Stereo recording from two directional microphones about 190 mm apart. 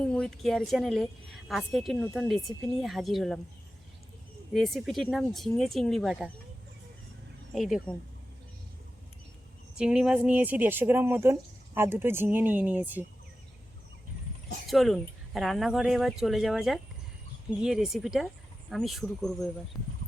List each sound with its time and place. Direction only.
0.0 s a woman's voice: 5° left (ahead or behind)
4.5 s a woman's voice: centre (ahead or behind)
7.5 s a woman's voice: centre (ahead or behind)
9.7 s speech: 5° right (ahead or behind)
14.7 s a woman's voice: centre (ahead or behind)